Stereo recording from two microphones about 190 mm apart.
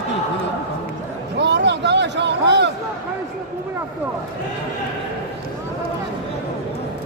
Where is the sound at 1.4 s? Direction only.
65° right (ahead or behind).